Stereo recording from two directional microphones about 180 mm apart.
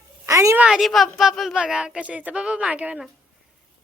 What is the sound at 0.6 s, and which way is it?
A woman's voice, centre (ahead or behind).